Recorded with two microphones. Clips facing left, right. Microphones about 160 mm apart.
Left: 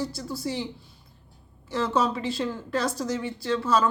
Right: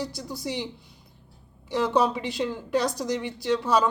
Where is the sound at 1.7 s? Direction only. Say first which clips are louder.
Right 2 dB; 15° right (ahead or behind).